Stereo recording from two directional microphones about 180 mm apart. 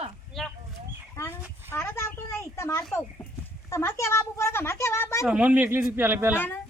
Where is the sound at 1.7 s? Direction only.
10° left (ahead or behind).